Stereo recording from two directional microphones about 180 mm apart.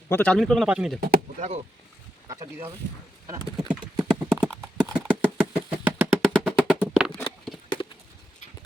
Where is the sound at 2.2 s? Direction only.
20° right (ahead or behind).